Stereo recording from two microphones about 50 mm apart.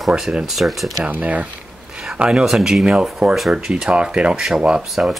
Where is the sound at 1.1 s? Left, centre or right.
Right.